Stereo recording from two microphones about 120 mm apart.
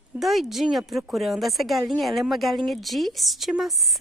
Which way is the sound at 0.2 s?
Centre (ahead or behind).